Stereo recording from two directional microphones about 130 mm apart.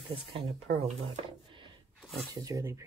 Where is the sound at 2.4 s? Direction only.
25° right (ahead or behind).